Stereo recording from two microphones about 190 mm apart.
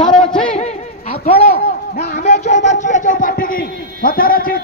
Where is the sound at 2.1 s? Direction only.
35° left (ahead or behind).